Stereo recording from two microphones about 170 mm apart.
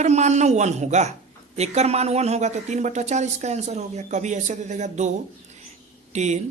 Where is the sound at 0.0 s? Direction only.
40° right (ahead or behind).